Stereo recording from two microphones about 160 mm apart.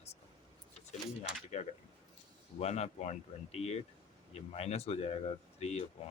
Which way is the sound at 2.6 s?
45° left (ahead or behind).